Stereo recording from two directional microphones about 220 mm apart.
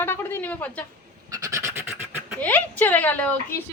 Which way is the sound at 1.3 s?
15° right (ahead or behind).